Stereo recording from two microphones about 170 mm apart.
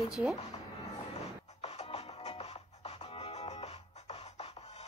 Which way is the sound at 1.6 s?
40° left (ahead or behind).